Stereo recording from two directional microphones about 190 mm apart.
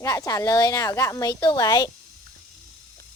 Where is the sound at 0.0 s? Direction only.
20° left (ahead or behind).